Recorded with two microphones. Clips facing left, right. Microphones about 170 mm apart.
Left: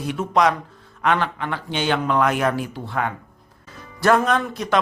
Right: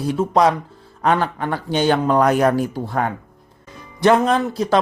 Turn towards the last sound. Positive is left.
turn(degrees=-30)  # may be behind; listen again after turning